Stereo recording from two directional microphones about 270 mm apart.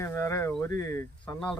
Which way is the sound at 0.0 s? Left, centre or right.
Centre.